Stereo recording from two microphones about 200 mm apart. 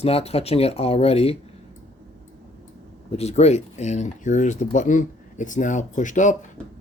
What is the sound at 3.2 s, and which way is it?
Speech, 35° left (ahead or behind).